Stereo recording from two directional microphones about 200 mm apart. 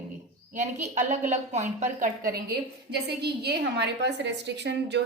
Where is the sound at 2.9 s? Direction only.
55° right (ahead or behind).